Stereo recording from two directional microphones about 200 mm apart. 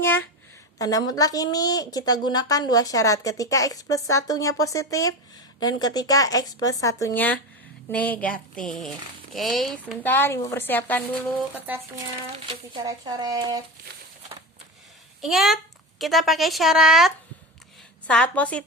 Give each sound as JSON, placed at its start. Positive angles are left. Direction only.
{"t": 0.8, "sound": "a woman's voice", "side_deg": 15}
{"t": 11.5, "sound": "speech", "side_deg": -10}
{"t": 12.5, "sound": "speech", "side_deg": -20}
{"t": 15.2, "sound": "a woman's voice", "side_deg": 0}